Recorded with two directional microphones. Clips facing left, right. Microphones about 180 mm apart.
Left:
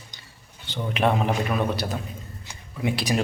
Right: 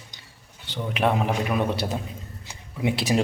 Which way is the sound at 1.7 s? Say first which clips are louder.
Right 1 dB; 25° right (ahead or behind).